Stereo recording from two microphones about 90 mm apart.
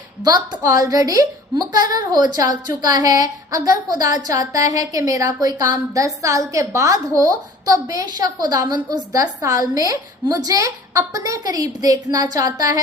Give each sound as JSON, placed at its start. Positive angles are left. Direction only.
{"t": 0.3, "sound": "a woman's voice", "side_deg": -45}